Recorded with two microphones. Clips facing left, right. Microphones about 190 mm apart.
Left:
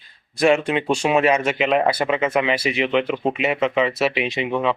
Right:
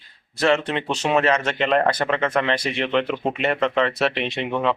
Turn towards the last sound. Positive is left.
turn(degrees=0)  # may be behind; listen again after turning